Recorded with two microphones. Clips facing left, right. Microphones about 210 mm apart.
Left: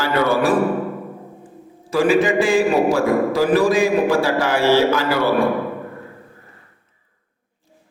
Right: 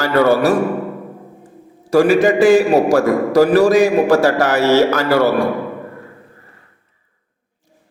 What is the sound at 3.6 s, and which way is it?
Speech, 75° right (ahead or behind).